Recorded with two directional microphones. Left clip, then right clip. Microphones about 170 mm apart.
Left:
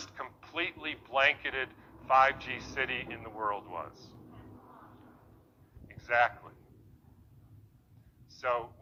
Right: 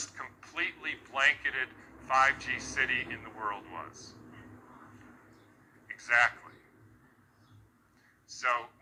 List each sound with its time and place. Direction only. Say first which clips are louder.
0.0 s a sound: right 1 dB; 25° left (ahead or behind)
2.8 s speech: right 4 dB; 30° left (ahead or behind)
5.9 s a man's voice: right 2 dB; 25° left (ahead or behind)
8.4 s speech: right 1 dB; 30° left (ahead or behind)